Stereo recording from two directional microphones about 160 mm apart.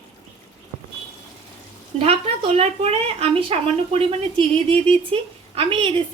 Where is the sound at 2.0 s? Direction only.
40° right (ahead or behind).